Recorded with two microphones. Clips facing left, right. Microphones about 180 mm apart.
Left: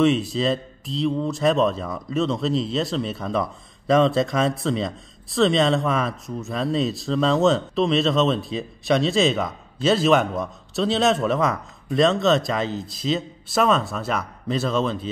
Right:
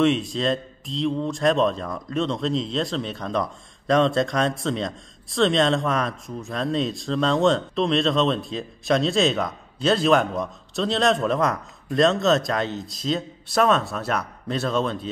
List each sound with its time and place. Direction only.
0.0 s speech: centre (ahead or behind)